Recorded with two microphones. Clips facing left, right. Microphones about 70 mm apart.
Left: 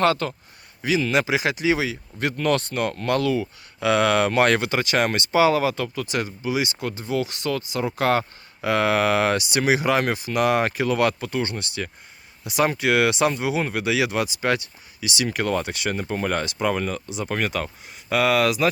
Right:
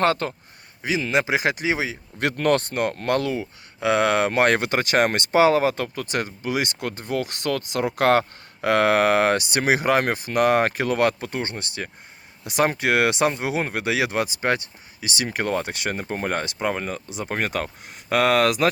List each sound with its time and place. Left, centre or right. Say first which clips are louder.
0.0 s speech: left 1 dB; right
0.8 s speech: left 1 dB; right
2.1 s speech: right 2 dB; right